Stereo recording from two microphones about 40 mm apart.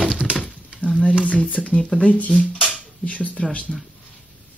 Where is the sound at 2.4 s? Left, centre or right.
Right.